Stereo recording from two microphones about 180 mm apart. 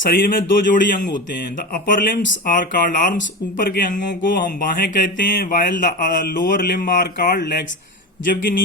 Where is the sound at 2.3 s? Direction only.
50° left (ahead or behind).